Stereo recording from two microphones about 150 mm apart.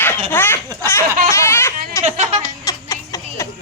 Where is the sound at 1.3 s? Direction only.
15° left (ahead or behind).